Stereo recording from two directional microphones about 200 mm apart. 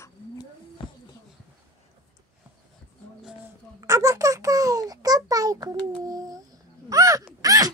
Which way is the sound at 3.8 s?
15° right (ahead or behind).